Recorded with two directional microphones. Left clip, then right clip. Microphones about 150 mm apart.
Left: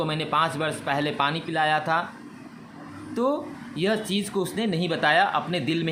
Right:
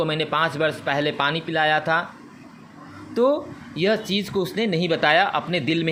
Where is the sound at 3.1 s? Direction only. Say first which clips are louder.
Right 6 dB; 20° right (ahead or behind).